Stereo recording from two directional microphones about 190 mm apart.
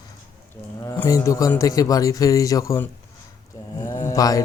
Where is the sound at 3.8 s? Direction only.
15° left (ahead or behind).